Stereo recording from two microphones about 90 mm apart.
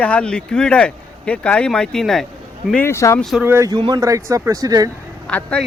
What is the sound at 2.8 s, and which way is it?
Speech, 30° left (ahead or behind).